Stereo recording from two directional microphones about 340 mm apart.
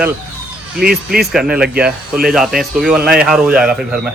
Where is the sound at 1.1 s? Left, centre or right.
Centre.